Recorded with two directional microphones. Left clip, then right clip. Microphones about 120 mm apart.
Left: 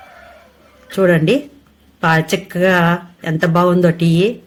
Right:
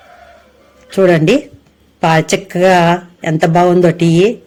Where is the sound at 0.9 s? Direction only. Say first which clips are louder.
Right 4 dB; 40° right (ahead or behind).